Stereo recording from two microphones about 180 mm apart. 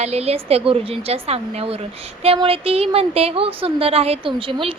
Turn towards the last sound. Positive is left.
turn(degrees=-30)  # may be behind; listen again after turning